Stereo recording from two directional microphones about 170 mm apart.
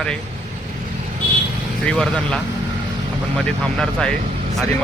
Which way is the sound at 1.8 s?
5° left (ahead or behind).